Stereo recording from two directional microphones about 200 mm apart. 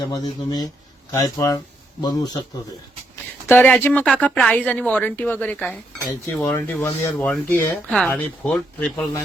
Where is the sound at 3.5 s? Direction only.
10° left (ahead or behind).